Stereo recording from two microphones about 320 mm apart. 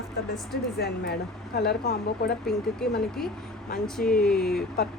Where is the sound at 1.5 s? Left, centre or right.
Left.